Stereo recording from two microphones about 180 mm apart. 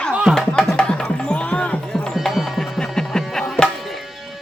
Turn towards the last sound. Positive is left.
turn(degrees=0)  # may be behind; listen again after turning